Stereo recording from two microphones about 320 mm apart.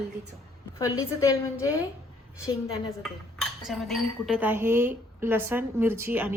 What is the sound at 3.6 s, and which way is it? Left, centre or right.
A woman's voice, centre.